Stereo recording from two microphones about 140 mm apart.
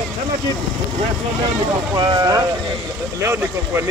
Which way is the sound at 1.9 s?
30° right (ahead or behind).